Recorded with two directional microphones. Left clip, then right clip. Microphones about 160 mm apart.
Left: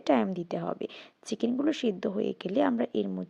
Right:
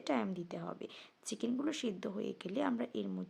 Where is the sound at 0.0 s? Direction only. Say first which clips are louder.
Left 10 dB; 35° left (ahead or behind).